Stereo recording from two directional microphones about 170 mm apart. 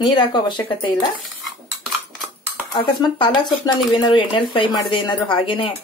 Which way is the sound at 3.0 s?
25° left (ahead or behind).